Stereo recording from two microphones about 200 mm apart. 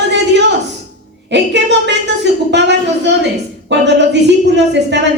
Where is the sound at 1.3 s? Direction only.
60° right (ahead or behind).